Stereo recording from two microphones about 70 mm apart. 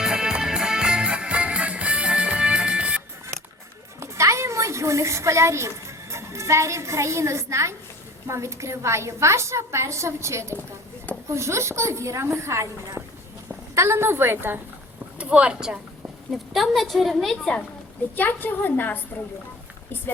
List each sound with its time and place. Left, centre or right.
0.0 s music: centre
4.0 s a child's voice: right
15.2 s a woman's voice: centre
16.5 s a woman's voice: centre
17.3 s a woman's voice: centre
18.2 s a woman's voice: left